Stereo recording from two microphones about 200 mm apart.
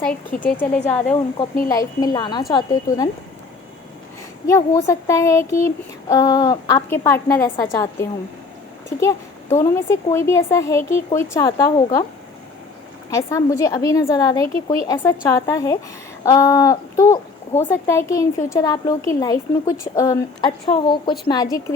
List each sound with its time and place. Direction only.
0.0 s speech: 5° left (ahead or behind)
4.4 s speech: 15° left (ahead or behind)
13.1 s speech: 15° left (ahead or behind)